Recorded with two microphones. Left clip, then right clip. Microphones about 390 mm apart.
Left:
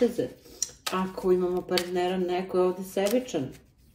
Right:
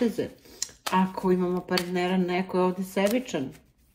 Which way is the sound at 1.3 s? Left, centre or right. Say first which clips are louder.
Left 4 dB; right.